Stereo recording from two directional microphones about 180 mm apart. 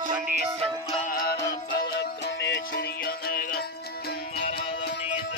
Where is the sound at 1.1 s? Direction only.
60° left (ahead or behind).